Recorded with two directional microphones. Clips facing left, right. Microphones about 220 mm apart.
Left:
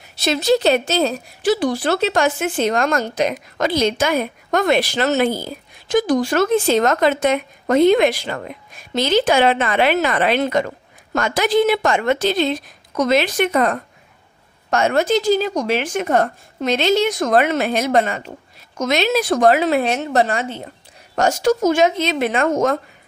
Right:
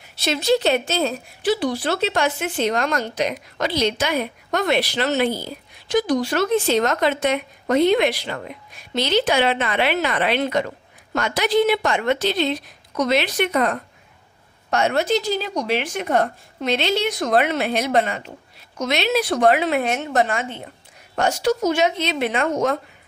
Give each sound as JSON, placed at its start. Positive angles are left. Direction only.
{"t": 0.1, "sound": "speech", "side_deg": 40}
{"t": 21.2, "sound": "speech", "side_deg": 45}